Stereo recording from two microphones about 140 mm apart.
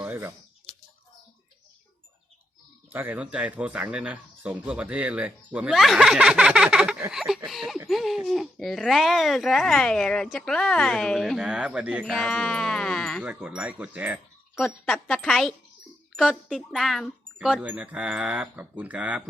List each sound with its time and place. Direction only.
0.0 s bird: 15° right (ahead or behind)
2.9 s speech: 15° right (ahead or behind)
12.2 s speech: 5° left (ahead or behind)
13.2 s speech: 10° right (ahead or behind)
14.6 s speech: 5° left (ahead or behind)